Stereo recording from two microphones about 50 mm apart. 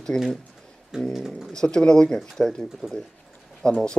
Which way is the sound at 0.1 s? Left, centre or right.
Centre.